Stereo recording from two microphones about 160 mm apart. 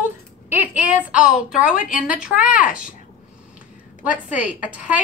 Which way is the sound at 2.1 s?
5° right (ahead or behind).